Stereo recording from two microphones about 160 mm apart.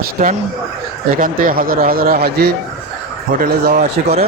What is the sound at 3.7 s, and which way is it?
Speech, 40° right (ahead or behind).